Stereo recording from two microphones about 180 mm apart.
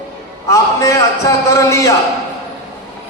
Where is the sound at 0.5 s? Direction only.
15° left (ahead or behind).